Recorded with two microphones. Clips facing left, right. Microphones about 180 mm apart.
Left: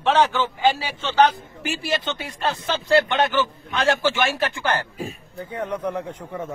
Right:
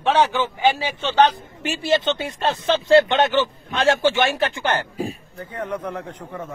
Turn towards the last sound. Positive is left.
turn(degrees=15)  # may be behind; listen again after turning